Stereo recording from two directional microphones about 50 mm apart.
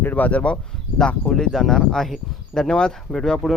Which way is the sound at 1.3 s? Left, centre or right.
Centre.